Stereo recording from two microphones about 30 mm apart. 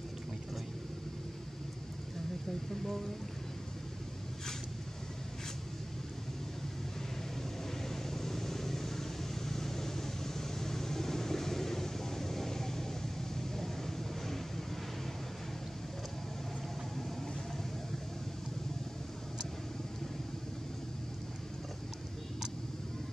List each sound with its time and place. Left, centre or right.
7.9 s vehicle: centre